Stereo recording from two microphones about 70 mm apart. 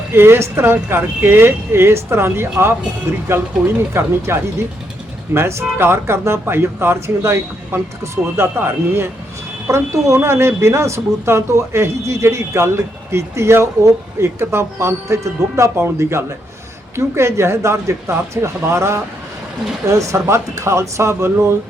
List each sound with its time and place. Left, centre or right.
0.1 s speech: right